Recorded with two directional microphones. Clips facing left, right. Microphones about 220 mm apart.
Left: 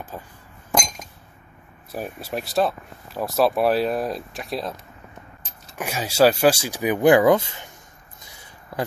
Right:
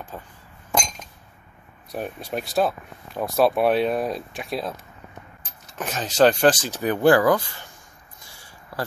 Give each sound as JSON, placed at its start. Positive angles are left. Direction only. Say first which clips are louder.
{"t": 1.9, "sound": "speech", "louder": "even", "side_deg": 5}
{"t": 5.8, "sound": "speech", "louder": "even", "side_deg": 10}
{"t": 8.2, "sound": "a sound", "louder": "left 1 dB", "side_deg": 20}